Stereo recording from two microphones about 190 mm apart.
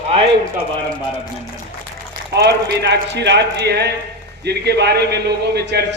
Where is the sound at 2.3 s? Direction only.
60° right (ahead or behind).